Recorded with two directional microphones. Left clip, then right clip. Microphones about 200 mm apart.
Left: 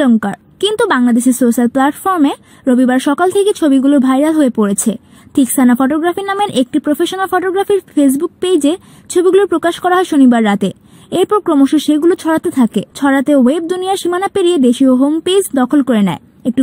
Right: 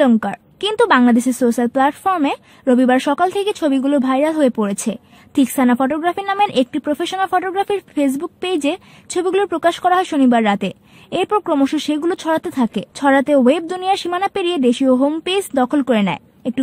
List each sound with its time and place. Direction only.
0.0 s a woman's voice: 25° left (ahead or behind)